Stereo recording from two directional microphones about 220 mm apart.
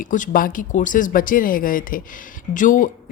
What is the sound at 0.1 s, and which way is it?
A woman's voice, 40° left (ahead or behind).